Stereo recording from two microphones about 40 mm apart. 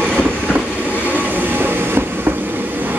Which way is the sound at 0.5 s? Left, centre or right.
Right.